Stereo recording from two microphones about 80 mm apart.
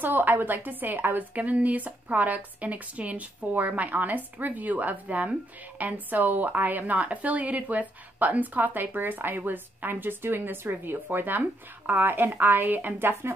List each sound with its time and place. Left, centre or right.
0.0 s a woman's voice: right